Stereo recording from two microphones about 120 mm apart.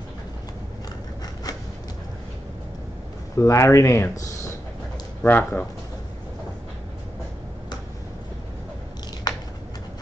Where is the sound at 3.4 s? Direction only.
25° left (ahead or behind).